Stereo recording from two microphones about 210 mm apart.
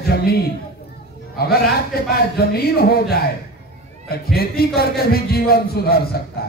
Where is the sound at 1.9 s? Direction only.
45° left (ahead or behind).